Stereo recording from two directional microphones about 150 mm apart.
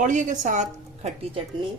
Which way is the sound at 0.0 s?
55° right (ahead or behind).